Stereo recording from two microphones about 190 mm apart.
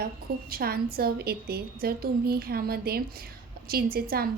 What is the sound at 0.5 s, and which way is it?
A woman's voice, 55° right (ahead or behind).